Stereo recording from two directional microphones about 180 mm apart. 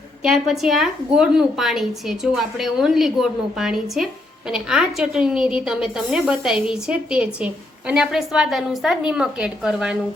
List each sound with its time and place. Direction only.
0.2 s a woman's voice: centre (ahead or behind)